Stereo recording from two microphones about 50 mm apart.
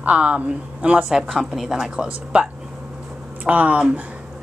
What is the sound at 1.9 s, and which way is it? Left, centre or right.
A woman's voice, right.